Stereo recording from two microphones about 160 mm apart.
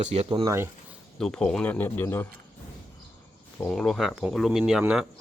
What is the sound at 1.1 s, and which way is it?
Speech, 5° left (ahead or behind).